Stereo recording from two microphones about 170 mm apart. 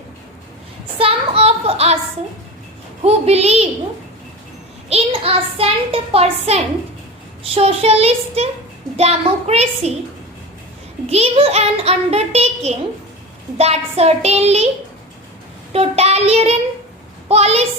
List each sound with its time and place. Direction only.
0.9 s child singing: 35° right (ahead or behind)
3.0 s a child's voice: 40° right (ahead or behind)
4.9 s a child's voice: 35° right (ahead or behind)
11.1 s a child's voice: 35° right (ahead or behind)
15.7 s a child's voice: 35° right (ahead or behind)